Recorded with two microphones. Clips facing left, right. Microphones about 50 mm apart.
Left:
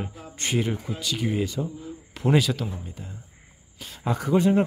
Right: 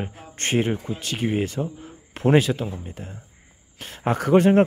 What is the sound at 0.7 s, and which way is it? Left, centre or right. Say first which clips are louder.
Speech: right 3 dB; right.